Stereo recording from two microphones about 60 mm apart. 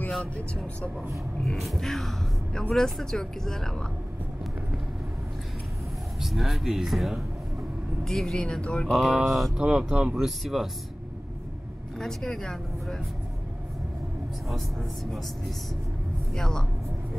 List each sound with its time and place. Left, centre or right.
0.1 s speech: centre
6.2 s speech: centre
9.0 s speech: centre
9.6 s speech: centre
12.0 s speech: centre
16.3 s speech: centre